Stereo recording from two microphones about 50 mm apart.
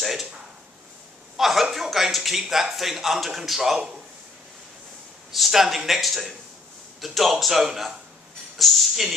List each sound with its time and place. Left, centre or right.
0.0 s a sound: centre
1.3 s a man's voice: centre
5.3 s a man's voice: centre